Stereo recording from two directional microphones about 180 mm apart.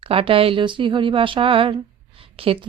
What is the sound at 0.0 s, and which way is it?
Speech, 30° right (ahead or behind).